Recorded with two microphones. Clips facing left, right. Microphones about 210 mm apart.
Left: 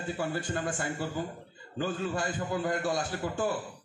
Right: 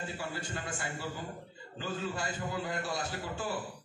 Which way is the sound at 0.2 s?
50° left (ahead or behind).